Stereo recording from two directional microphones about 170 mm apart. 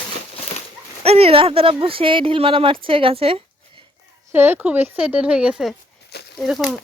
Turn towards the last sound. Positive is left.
turn(degrees=0)  # may be behind; listen again after turning